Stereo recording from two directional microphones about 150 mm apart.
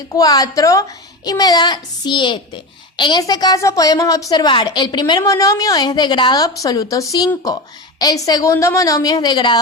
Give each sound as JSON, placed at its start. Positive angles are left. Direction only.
{"t": 0.1, "sound": "a woman's voice", "side_deg": 25}